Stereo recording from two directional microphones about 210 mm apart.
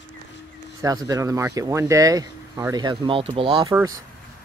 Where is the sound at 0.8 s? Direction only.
15° right (ahead or behind).